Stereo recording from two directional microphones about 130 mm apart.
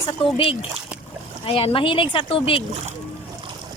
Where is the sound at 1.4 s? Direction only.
45° left (ahead or behind).